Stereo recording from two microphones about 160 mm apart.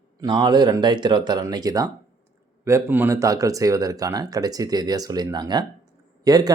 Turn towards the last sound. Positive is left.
turn(degrees=-25)  # may be behind; listen again after turning